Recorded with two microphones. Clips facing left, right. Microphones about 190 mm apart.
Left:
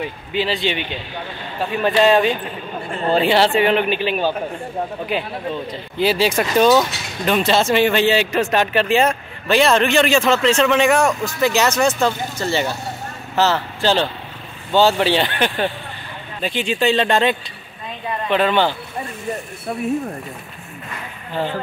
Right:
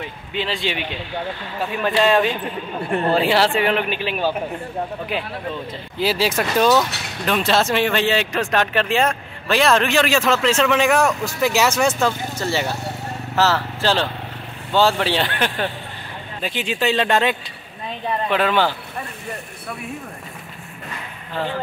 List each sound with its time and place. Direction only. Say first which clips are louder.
0.3 s speech: left 3 dB; 5° left (ahead or behind)